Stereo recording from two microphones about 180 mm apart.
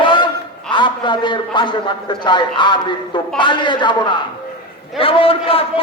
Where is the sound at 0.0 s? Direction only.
25° left (ahead or behind).